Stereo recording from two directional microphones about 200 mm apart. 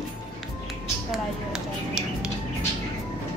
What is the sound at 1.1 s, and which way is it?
Speech, 5° right (ahead or behind).